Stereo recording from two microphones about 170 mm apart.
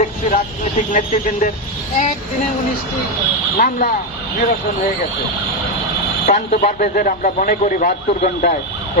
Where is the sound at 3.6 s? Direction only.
55° left (ahead or behind).